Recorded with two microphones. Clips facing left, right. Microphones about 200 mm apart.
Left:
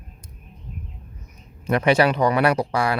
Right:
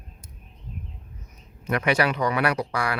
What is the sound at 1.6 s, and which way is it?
Speech, 30° left (ahead or behind).